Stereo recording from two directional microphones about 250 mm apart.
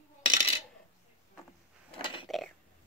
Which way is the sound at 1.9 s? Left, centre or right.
Left.